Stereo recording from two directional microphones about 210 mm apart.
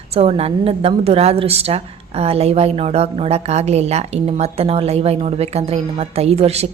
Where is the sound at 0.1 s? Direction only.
30° right (ahead or behind).